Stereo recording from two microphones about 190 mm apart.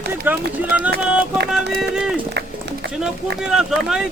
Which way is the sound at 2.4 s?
65° right (ahead or behind).